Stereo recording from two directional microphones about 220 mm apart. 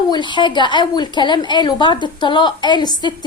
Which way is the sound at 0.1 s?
20° left (ahead or behind).